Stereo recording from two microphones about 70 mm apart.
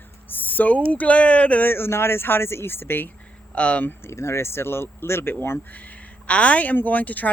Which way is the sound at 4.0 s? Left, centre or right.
Left.